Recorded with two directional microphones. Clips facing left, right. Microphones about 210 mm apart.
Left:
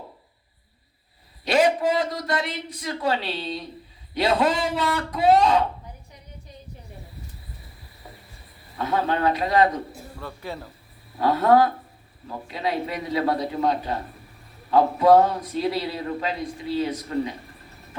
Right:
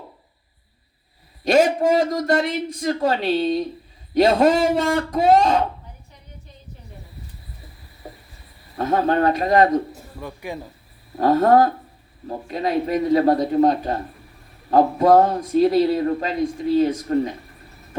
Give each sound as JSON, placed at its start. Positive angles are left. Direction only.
{"t": 1.5, "sound": "a man's voice", "side_deg": -45}
{"t": 8.0, "sound": "a sound", "side_deg": -50}
{"t": 8.8, "sound": "a man's voice", "side_deg": -45}
{"t": 10.2, "sound": "speech", "side_deg": -15}
{"t": 11.2, "sound": "a man's voice", "side_deg": -45}